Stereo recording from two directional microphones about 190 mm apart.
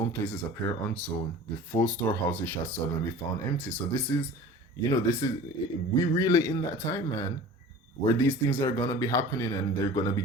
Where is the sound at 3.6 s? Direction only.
10° left (ahead or behind).